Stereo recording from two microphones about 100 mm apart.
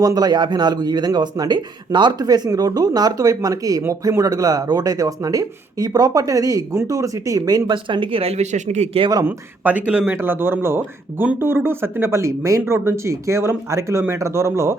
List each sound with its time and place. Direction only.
0.0 s speech: 40° right (ahead or behind)
7.9 s speech: 55° right (ahead or behind); by 9.0 s 90° right
9.2 s speech: 15° right (ahead or behind)